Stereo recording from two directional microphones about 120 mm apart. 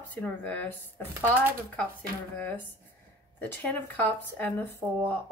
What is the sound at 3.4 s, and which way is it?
Speech, 15° left (ahead or behind).